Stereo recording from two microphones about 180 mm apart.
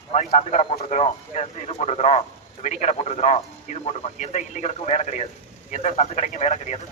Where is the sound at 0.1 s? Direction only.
35° left (ahead or behind).